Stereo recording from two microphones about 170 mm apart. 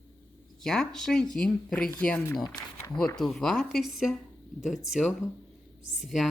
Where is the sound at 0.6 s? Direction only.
5° left (ahead or behind).